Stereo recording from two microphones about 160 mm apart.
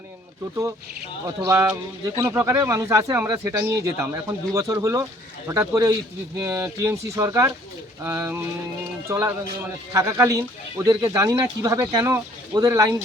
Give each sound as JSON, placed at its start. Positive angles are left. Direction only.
{"t": 1.5, "sound": "speech", "side_deg": -15}